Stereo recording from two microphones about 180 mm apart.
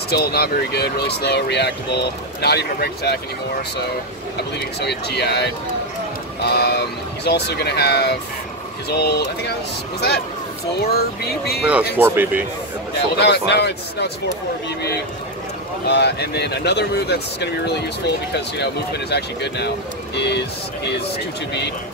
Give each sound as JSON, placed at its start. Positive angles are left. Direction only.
{"t": 0.1, "sound": "speech", "side_deg": 60}
{"t": 4.7, "sound": "speech", "side_deg": 65}
{"t": 11.6, "sound": "speech", "side_deg": -10}
{"t": 13.2, "sound": "speech", "side_deg": 65}
{"t": 15.9, "sound": "speech", "side_deg": 65}